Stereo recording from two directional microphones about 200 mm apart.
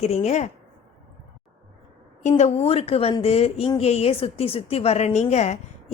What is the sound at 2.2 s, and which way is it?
A woman's voice, 35° left (ahead or behind).